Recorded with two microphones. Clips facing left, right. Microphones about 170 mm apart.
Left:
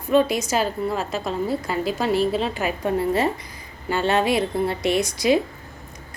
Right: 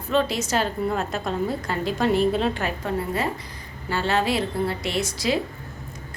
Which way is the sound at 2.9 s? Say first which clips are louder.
Left 6 dB; 15° left (ahead or behind).